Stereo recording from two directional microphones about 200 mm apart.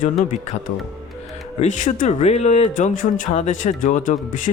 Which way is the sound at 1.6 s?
40° left (ahead or behind).